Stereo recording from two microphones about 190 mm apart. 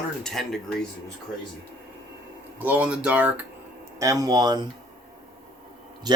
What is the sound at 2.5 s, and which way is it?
Speech, 10° right (ahead or behind).